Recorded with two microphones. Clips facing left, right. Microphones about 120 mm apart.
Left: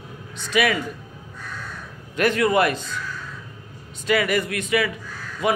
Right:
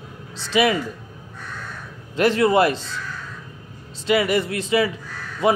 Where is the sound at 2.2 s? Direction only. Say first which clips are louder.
Right 2 dB; 25° right (ahead or behind).